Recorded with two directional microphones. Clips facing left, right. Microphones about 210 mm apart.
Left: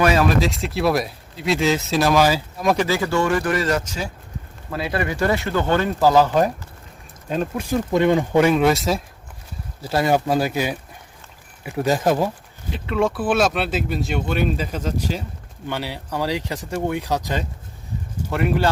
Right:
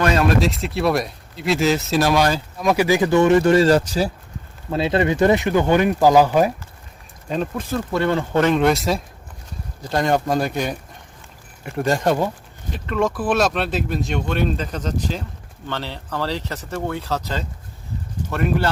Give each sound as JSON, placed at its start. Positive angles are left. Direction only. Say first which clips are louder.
{"t": 0.0, "sound": "speech", "louder": "even", "side_deg": 5}
{"t": 2.8, "sound": "speech", "louder": "right 5 dB", "side_deg": -15}
{"t": 7.3, "sound": "speech", "louder": "left 1 dB", "side_deg": 5}